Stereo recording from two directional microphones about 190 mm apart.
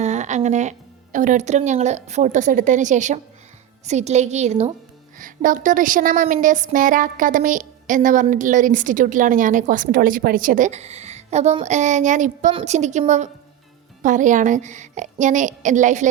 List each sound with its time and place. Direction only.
0.0 s a woman's voice: 35° right (ahead or behind)